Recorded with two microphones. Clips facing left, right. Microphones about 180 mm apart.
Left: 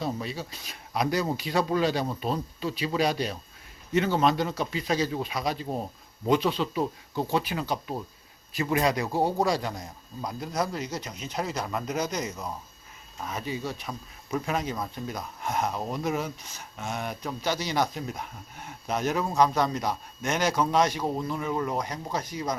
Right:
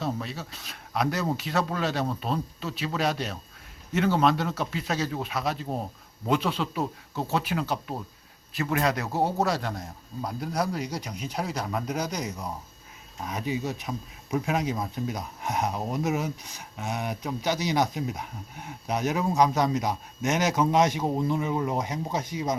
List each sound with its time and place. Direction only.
0.0 s speech: centre (ahead or behind)
11.9 s speech: 10° right (ahead or behind)
18.0 s speech: centre (ahead or behind)
18.6 s a man's voice: 15° right (ahead or behind)